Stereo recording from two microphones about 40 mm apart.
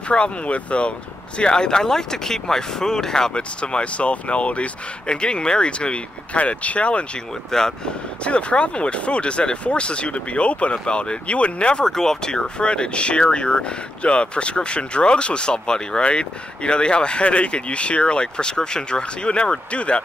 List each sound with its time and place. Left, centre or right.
0.1 s speech: left
3.3 s speech: left
7.5 s speech: centre
8.2 s speech: left
11.8 s speech: centre; by 20.0 s left